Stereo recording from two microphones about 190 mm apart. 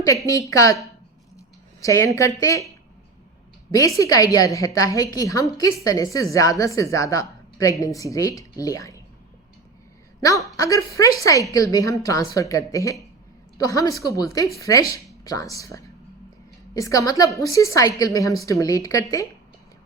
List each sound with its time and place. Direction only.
0.3 s a woman's voice: 15° left (ahead or behind)
1.8 s a woman's voice: 15° left (ahead or behind)
3.7 s a woman's voice: 20° left (ahead or behind)
10.2 s a woman's voice: 15° left (ahead or behind)